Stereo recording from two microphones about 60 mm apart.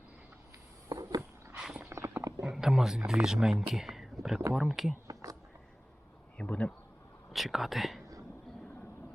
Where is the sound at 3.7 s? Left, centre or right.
Centre.